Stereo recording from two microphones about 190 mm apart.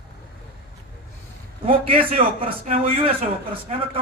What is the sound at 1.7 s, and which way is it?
A man's voice, 30° right (ahead or behind).